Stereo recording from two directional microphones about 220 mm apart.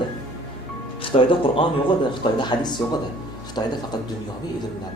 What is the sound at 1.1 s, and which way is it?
A woman's voice, 25° left (ahead or behind).